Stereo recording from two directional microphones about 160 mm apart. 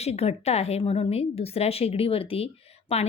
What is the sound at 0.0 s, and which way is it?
A woman's voice, 40° left (ahead or behind).